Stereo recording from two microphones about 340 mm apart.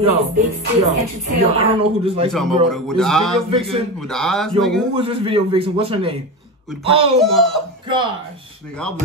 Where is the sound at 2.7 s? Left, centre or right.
Centre.